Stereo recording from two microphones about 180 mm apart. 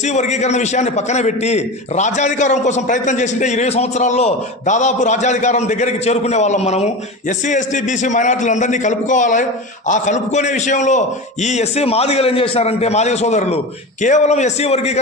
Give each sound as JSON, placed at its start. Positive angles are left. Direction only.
{"t": 0.0, "sound": "a man's voice", "side_deg": 40}